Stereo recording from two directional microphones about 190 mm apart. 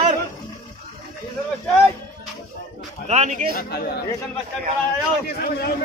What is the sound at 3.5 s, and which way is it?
Speech, 55° left (ahead or behind).